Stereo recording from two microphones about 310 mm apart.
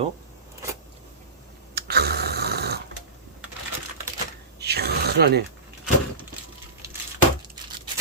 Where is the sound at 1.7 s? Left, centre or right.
Right.